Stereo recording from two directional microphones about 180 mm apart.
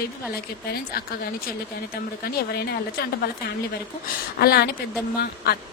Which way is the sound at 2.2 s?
60° left (ahead or behind).